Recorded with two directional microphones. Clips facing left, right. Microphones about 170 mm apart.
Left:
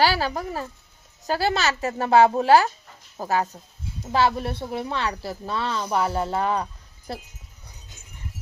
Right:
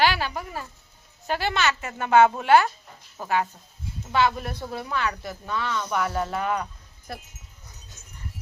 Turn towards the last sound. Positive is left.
turn(degrees=30)  # may be behind; listen again after turning